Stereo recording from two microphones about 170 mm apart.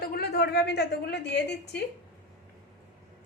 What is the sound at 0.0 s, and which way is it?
A woman's voice, 65° left (ahead or behind).